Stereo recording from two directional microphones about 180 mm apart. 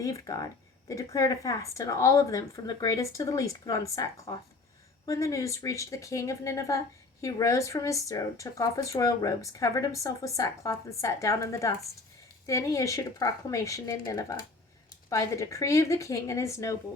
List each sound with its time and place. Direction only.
0.0 s speech: 20° left (ahead or behind)